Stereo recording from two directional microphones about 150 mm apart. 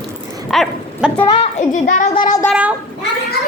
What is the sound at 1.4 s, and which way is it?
Child singing, 55° left (ahead or behind).